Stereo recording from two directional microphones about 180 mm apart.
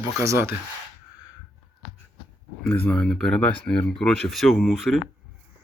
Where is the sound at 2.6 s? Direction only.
5° left (ahead or behind).